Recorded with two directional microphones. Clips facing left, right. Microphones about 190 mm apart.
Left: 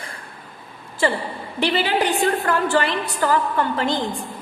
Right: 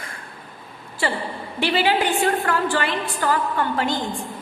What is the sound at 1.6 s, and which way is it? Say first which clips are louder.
A woman's voice: even; 40° left (ahead or behind).